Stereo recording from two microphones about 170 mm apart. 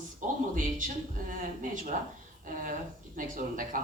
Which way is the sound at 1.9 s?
50° right (ahead or behind).